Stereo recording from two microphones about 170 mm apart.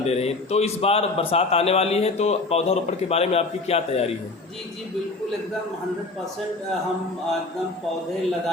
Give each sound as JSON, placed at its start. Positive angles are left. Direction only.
{"t": 0.0, "sound": "a man's voice", "side_deg": 40}